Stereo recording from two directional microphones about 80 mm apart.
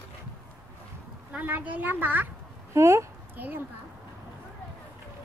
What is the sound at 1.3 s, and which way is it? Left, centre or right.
Speech, right.